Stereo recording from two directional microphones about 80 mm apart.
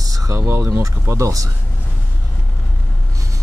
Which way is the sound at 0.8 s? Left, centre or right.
Right.